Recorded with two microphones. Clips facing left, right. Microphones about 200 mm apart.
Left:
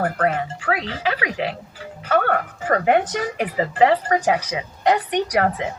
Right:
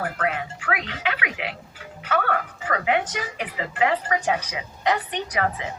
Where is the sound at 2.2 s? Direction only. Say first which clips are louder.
Left 5 dB; 45° left (ahead or behind); by 4.6 s 30° left (ahead or behind).